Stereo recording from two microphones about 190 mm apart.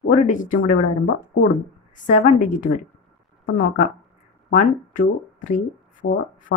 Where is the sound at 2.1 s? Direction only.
40° left (ahead or behind).